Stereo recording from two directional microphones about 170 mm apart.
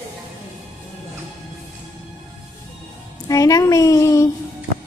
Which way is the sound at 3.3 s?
20° left (ahead or behind).